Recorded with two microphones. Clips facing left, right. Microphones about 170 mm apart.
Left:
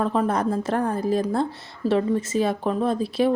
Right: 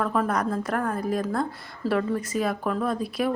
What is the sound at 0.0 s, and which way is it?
Speech, 25° left (ahead or behind).